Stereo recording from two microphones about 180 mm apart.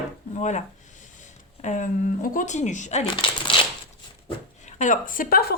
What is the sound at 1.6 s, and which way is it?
Speech, 45° left (ahead or behind).